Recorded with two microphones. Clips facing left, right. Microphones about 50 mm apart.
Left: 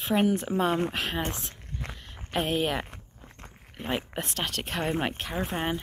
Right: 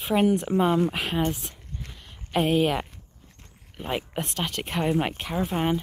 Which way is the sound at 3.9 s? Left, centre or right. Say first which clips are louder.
Right 2 dB; centre.